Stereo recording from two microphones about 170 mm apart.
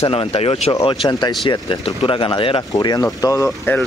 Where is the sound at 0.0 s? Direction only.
35° left (ahead or behind); by 3.8 s 15° left (ahead or behind).